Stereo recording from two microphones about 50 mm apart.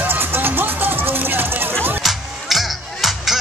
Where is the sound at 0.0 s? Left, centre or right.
Right.